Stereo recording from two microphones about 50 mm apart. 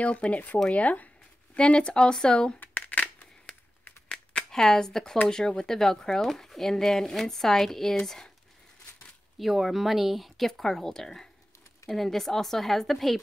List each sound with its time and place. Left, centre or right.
0.0 s speech: left
0.7 s a sound: left
1.6 s speech: left
2.6 s shuffling cards: left
4.5 s speech: centre
9.4 s speech: centre